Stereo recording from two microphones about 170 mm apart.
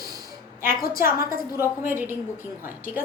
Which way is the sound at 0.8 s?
55° left (ahead or behind).